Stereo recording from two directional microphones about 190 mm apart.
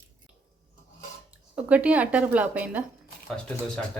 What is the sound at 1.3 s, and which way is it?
Speech, 5° right (ahead or behind).